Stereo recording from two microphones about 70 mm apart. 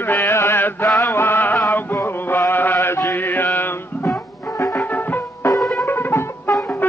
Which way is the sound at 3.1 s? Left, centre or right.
Left.